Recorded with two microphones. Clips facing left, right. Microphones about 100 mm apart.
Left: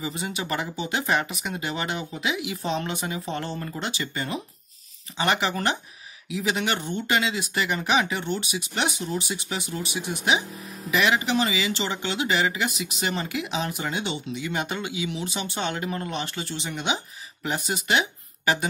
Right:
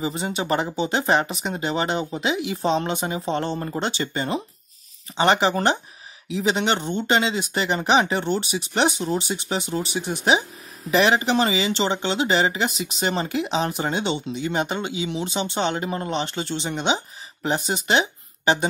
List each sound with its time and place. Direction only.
0.0 s speech: 30° right (ahead or behind)